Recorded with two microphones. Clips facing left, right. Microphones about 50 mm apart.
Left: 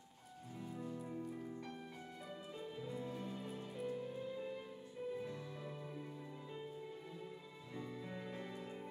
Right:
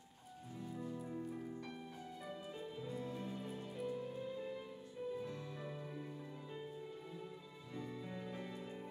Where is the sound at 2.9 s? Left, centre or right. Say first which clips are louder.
Right 1 dB; centre.